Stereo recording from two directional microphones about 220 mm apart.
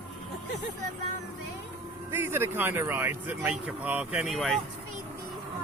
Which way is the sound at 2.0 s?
10° right (ahead or behind).